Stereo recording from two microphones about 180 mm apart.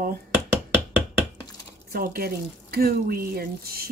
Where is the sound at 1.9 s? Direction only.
55° right (ahead or behind).